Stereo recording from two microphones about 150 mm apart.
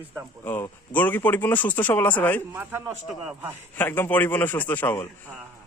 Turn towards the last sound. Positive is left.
turn(degrees=15)  # may be behind; listen again after turning